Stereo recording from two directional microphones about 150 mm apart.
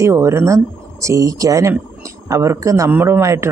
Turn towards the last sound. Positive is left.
turn(degrees=-20)  # may be behind; listen again after turning